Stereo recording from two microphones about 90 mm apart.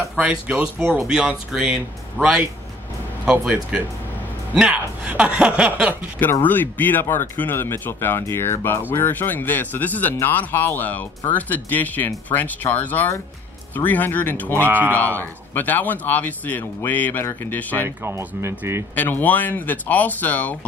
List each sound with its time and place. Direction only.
0.2 s speech: 10° right (ahead or behind)
6.4 s speech: 20° left (ahead or behind)
14.6 s speech: 20° right (ahead or behind)
15.1 s speech: 20° left (ahead or behind)
17.8 s speech: 30° right (ahead or behind)
18.9 s speech: 20° left (ahead or behind)